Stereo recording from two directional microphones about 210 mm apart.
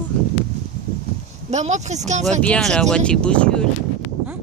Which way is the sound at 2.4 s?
5° left (ahead or behind).